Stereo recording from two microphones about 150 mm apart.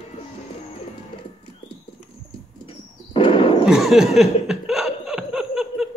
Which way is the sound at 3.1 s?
35° left (ahead or behind).